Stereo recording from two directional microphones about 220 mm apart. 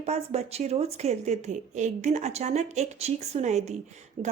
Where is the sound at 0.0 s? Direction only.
30° right (ahead or behind).